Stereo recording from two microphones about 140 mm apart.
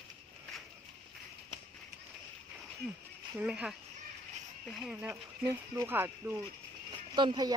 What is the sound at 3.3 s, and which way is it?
Speech, 10° right (ahead or behind).